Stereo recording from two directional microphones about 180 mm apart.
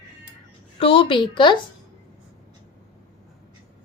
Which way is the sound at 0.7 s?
30° left (ahead or behind).